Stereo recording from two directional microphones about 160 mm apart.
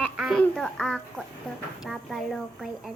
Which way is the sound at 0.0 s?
Centre (ahead or behind).